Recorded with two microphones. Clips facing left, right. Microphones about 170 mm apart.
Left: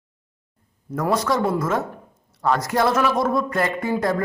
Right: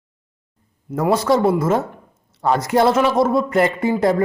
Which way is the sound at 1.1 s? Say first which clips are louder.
Right 5 dB; 30° right (ahead or behind).